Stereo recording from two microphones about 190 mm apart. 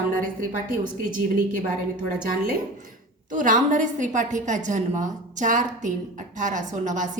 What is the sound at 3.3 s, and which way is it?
A woman's voice, 45° right (ahead or behind).